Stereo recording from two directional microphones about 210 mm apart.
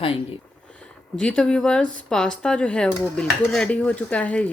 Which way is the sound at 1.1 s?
5° left (ahead or behind).